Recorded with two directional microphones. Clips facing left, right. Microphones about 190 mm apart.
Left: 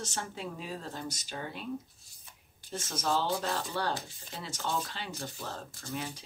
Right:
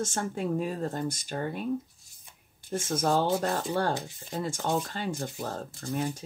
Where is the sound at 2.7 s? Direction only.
50° right (ahead or behind).